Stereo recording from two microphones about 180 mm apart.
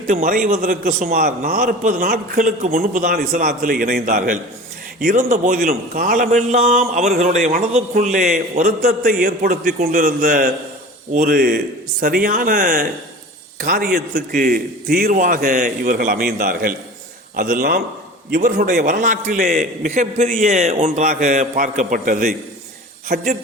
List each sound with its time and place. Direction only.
0.1 s a man's voice: 45° right (ahead or behind)
9.2 s a man's voice: 55° right (ahead or behind)
13.9 s a man's voice: 65° right (ahead or behind)
18.8 s a man's voice: 45° right (ahead or behind); by 23.4 s 60° right (ahead or behind)